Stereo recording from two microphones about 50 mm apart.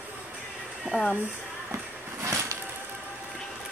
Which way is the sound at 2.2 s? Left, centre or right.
Right.